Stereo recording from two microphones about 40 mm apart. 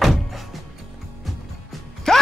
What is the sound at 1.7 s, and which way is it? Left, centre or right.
Mechanisms, centre.